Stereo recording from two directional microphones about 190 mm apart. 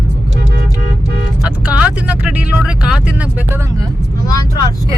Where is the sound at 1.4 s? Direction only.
5° right (ahead or behind).